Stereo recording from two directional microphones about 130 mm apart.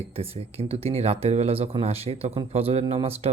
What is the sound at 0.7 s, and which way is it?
Speech, 50° right (ahead or behind).